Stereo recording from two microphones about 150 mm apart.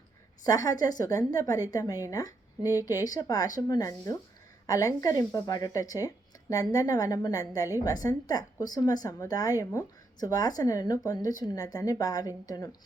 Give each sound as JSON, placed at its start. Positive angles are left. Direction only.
{"t": 0.4, "sound": "speech", "side_deg": 25}